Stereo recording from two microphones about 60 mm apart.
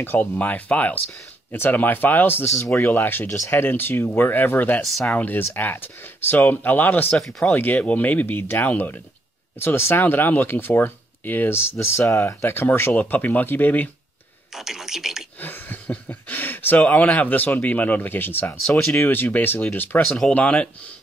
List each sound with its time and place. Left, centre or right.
0.0 s speech: left
7.2 s speech: centre
7.5 s speech: left
12.1 s speech: left
12.4 s speech: left
14.5 s speech: centre
15.4 s a sound: left
16.1 s speech: left
16.8 s speech: left
20.3 s speech: centre